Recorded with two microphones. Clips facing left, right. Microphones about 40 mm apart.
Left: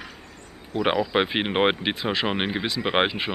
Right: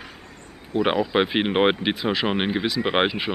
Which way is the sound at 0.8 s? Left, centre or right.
Centre.